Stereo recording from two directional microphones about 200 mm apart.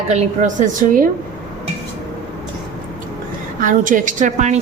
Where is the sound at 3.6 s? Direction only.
40° right (ahead or behind).